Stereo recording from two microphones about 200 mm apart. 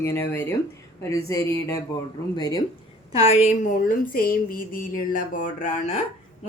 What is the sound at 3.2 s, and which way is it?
Speech, 35° left (ahead or behind).